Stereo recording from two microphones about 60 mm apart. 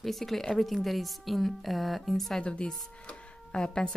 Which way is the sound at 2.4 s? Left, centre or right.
Centre.